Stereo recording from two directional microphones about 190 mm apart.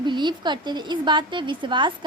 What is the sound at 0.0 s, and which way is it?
A woman's voice, 25° right (ahead or behind).